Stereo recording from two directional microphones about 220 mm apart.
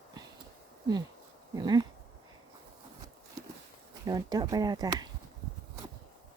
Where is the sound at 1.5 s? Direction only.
20° right (ahead or behind).